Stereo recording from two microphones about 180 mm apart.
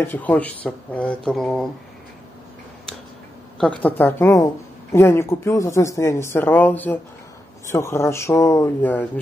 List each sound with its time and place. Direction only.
0.0 s speech: 10° left (ahead or behind)
3.5 s speech: 5° left (ahead or behind)